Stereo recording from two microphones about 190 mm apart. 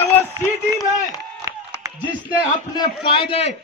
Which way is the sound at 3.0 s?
25° left (ahead or behind).